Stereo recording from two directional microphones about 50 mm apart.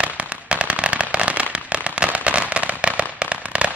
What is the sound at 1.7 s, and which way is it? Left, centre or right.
Firecracker, right.